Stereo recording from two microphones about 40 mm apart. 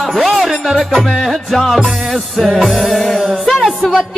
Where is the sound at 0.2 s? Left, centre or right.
Centre.